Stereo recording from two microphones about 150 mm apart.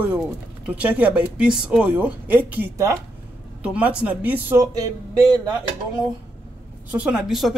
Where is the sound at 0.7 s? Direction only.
10° right (ahead or behind).